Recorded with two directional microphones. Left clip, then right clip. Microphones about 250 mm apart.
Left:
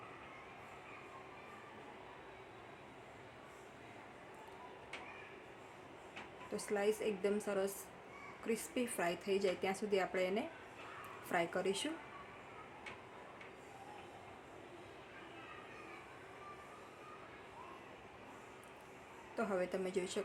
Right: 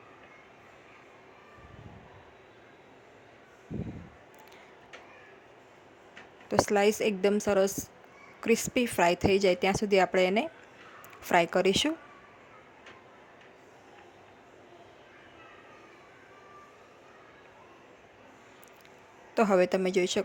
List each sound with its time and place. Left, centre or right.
6.5 s a woman's voice: right
19.3 s a woman's voice: right